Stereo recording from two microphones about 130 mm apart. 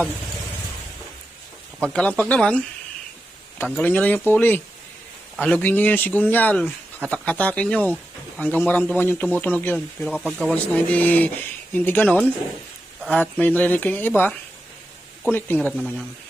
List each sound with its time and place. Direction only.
1.8 s speech: 10° left (ahead or behind)
10.1 s speech: centre (ahead or behind)
10.5 s speech: 10° left (ahead or behind)
13.4 s speech: 15° left (ahead or behind)